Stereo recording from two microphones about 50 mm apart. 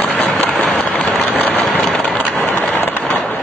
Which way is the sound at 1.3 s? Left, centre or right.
Left.